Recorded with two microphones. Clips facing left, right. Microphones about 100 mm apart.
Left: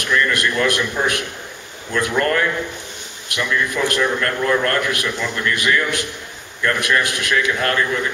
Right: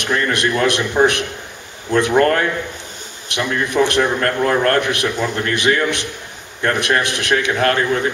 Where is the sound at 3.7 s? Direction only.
25° right (ahead or behind).